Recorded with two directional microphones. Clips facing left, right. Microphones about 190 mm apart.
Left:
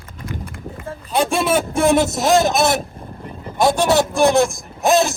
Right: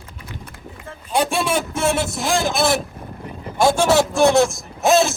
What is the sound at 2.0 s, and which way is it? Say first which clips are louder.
Speech: left 5 dB; 40° left (ahead or behind).